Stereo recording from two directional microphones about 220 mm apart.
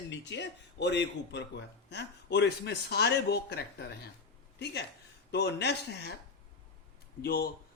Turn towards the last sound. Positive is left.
turn(degrees=45)  # may be behind; listen again after turning